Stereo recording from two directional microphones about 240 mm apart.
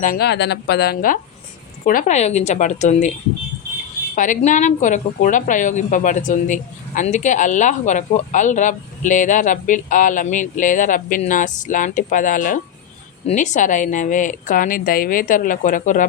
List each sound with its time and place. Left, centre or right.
0.0 s a woman's voice: left
4.1 s a woman's voice: left